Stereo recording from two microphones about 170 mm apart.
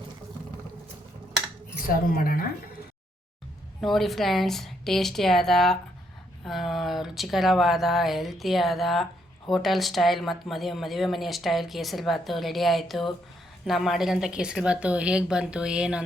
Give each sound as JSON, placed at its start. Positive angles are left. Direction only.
{"t": 2.1, "sound": "speech", "side_deg": 60}
{"t": 3.8, "sound": "speech", "side_deg": 0}